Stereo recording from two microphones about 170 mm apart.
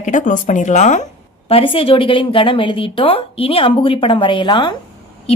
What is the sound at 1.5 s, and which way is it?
A woman's voice, 35° left (ahead or behind).